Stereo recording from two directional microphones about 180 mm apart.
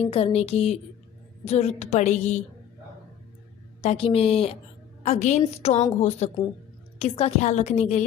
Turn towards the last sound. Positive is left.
turn(degrees=35)  # may be behind; listen again after turning